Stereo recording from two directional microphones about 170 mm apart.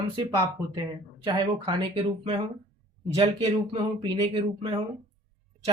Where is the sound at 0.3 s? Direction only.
25° right (ahead or behind).